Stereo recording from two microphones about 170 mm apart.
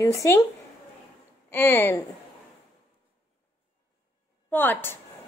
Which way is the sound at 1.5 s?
10° left (ahead or behind).